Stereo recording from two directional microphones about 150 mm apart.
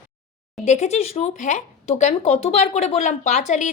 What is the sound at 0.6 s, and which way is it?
Speech, 50° left (ahead or behind).